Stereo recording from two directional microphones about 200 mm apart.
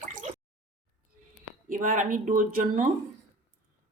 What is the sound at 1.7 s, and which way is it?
Speech, 40° right (ahead or behind).